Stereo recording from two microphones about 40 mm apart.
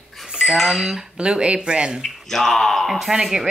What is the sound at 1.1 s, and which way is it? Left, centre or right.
Speech, right.